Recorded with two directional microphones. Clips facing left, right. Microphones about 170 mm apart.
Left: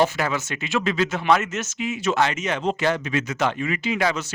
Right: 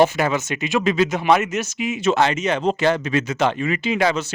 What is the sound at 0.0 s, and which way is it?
Speech, 20° right (ahead or behind).